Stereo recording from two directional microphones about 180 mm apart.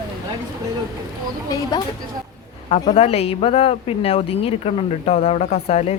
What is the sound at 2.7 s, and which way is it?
A woman's voice, 35° left (ahead or behind).